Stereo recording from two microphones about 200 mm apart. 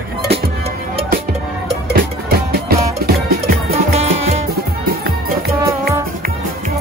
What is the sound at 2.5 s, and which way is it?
Music, 50° right (ahead or behind).